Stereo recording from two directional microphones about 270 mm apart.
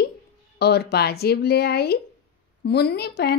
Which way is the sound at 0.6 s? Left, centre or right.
Left.